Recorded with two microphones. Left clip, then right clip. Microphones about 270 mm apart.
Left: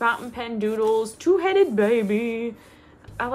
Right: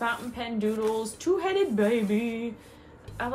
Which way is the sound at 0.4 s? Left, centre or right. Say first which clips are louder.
Left 5 dB; left.